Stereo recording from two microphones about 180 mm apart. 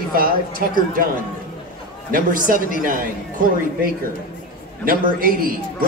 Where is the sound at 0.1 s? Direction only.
50° right (ahead or behind).